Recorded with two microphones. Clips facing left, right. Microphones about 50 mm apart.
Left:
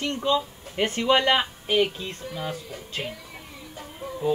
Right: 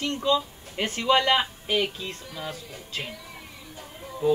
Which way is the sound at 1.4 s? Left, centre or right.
Centre.